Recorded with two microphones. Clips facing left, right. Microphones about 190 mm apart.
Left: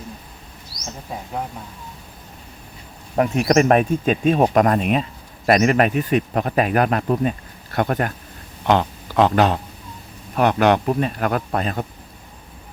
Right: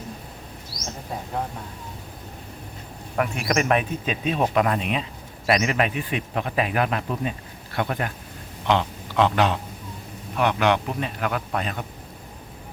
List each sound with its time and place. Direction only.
3.2 s speech: 40° left (ahead or behind)